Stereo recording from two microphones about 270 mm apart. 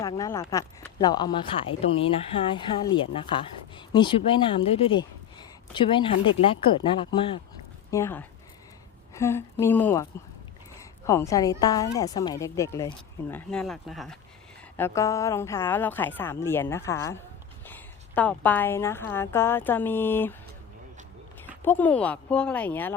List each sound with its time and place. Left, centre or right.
0.0 s a woman's voice: centre
21.4 s speech: centre